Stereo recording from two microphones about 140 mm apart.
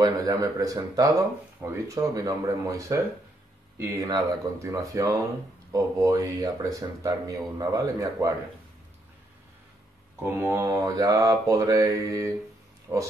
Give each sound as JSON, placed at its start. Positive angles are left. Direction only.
{"t": 0.0, "sound": "speech", "side_deg": -25}
{"t": 4.0, "sound": "speech", "side_deg": -25}
{"t": 10.2, "sound": "speech", "side_deg": -20}